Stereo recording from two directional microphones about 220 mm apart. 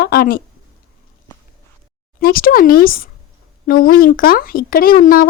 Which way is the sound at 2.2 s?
40° left (ahead or behind).